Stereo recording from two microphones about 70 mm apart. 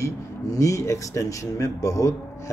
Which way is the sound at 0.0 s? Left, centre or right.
Left.